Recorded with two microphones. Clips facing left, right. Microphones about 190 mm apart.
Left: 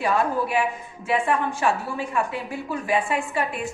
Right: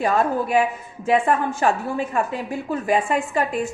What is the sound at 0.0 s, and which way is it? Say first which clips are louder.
A woman's voice: right 2 dB; 45° right (ahead or behind).